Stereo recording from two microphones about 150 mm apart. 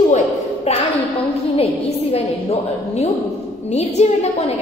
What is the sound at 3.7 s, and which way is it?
Speech, 45° left (ahead or behind).